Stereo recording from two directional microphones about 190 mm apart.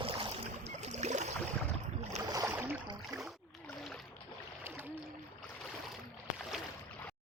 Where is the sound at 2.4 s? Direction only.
10° right (ahead or behind).